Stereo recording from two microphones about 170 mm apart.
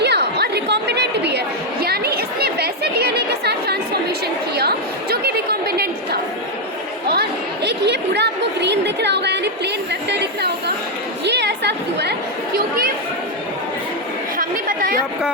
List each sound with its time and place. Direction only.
0.0 s chatter: 80° right
1.8 s chatter: 65° right (ahead or behind)
12.5 s chatter: 60° right (ahead or behind)
14.3 s chatter: 55° right (ahead or behind)